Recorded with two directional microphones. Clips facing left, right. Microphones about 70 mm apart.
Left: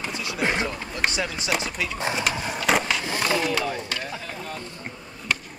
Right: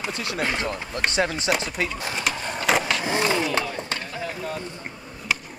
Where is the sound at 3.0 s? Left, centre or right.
Right.